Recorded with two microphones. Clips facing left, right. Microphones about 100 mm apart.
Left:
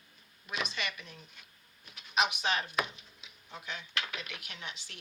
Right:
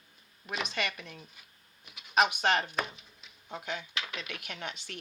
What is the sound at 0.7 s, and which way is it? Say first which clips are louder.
Speech: right 4 dB; 55° right (ahead or behind).